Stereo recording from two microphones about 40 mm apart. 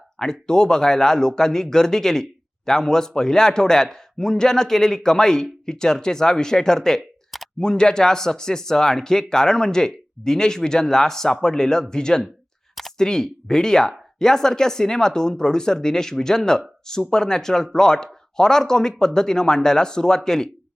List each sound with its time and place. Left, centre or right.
0.2 s a man's voice: centre